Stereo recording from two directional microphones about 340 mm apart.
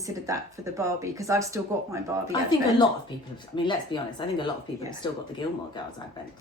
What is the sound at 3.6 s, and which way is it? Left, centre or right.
Speech, centre.